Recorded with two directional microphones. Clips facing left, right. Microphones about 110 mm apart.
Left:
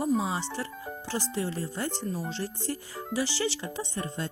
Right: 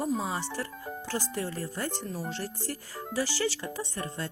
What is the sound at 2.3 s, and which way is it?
Speech, 20° left (ahead or behind).